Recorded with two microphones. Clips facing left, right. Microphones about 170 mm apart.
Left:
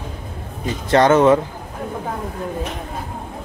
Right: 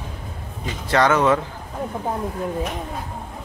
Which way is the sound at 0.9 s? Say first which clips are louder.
Left 5 dB; 20° left (ahead or behind).